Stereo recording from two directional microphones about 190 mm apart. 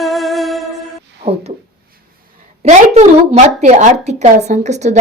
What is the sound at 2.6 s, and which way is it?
A woman's voice, 35° right (ahead or behind).